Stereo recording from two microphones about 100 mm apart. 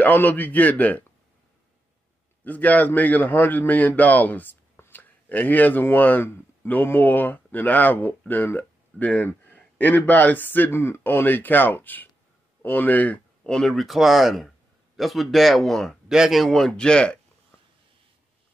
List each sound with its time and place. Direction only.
0.0 s a man's voice: 15° left (ahead or behind)
2.4 s a man's voice: 15° left (ahead or behind)